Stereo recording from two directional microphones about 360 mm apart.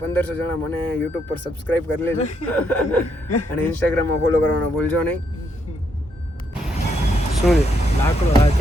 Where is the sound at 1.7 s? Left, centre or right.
Centre.